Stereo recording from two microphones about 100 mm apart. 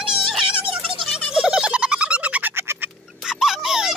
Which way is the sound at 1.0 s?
5° right (ahead or behind).